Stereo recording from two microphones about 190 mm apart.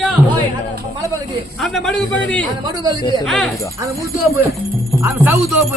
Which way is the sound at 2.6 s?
20° right (ahead or behind).